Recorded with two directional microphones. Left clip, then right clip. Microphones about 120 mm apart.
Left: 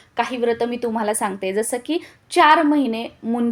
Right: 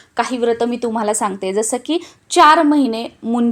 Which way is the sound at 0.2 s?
40° right (ahead or behind).